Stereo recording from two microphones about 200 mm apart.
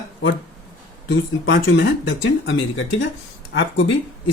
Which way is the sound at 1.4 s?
60° left (ahead or behind).